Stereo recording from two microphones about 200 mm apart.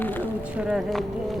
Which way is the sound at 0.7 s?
Centre (ahead or behind).